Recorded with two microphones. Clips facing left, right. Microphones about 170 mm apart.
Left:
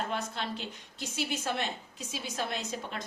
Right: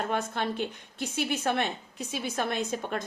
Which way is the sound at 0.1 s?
55° right (ahead or behind).